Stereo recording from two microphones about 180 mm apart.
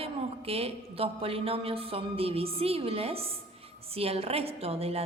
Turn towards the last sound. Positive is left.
turn(degrees=-35)  # may be behind; listen again after turning